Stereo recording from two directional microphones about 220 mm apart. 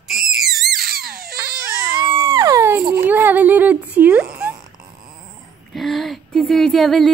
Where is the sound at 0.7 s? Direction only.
45° right (ahead or behind).